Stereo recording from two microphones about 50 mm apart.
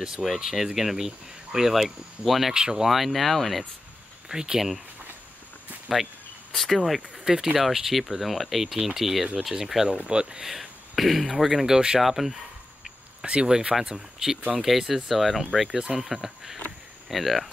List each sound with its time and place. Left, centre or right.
0.4 s speech: centre
2.5 s speech: centre
2.9 s speech: centre
4.3 s speech: centre
5.9 s speech: centre
7.2 s speech: centre
9.9 s speech: centre
10.4 s speech: centre
13.2 s speech: centre